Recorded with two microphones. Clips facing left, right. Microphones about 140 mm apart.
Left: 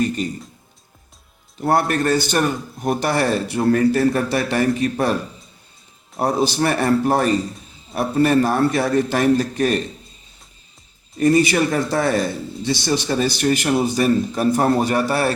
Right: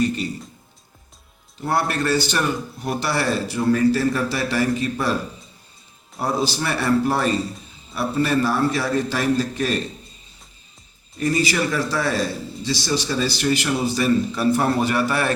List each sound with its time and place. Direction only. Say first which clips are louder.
1.6 s speech: left 4 dB; 50° left (ahead or behind)
6.1 s speech: left 4 dB; 50° left (ahead or behind)
11.2 s speech: left 6 dB; 50° left (ahead or behind)